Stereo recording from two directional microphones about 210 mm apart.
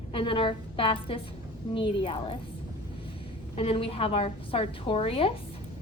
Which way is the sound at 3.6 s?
25° left (ahead or behind).